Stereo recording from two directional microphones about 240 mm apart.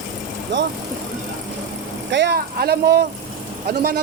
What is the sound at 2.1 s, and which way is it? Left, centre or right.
Speech, right.